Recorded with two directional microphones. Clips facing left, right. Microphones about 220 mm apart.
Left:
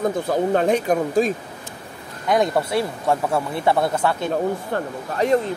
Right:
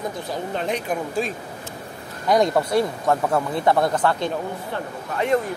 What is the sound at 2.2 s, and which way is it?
Speech, centre (ahead or behind).